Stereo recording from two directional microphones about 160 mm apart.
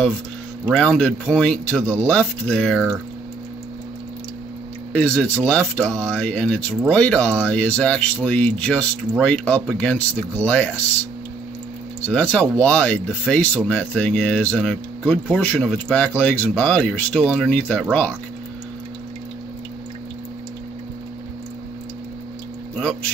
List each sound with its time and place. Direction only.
0.7 s speech: 5° left (ahead or behind)
4.9 s speech: 10° left (ahead or behind)
12.0 s speech: 5° left (ahead or behind)
22.8 s a sound: 10° left (ahead or behind)